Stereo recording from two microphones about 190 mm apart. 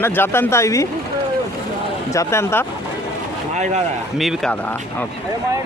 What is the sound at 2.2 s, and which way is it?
Speech, 15° left (ahead or behind).